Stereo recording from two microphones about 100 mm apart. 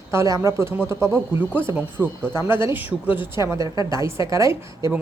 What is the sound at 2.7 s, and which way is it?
Speech, 20° right (ahead or behind).